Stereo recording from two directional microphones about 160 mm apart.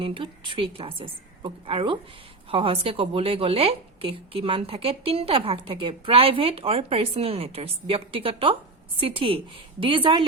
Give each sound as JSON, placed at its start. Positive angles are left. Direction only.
{"t": 0.0, "sound": "a woman's voice", "side_deg": -35}